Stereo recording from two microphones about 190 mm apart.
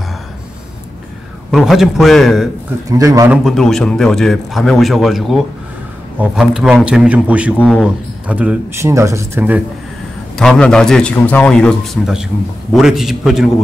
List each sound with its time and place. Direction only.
1.5 s a man's voice: centre (ahead or behind)
2.9 s speech: 15° right (ahead or behind)
3.4 s a man's voice: centre (ahead or behind)
7.5 s a man's voice: 5° left (ahead or behind)
8.3 s speech: 5° right (ahead or behind)
10.3 s a man's voice: 5° left (ahead or behind)